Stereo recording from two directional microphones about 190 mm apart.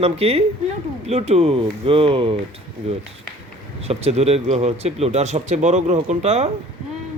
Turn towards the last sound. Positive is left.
turn(degrees=-35)  # may be behind; listen again after turning